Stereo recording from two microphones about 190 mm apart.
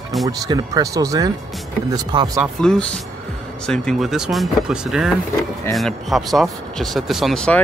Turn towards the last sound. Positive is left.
turn(degrees=5)  # may be behind; listen again after turning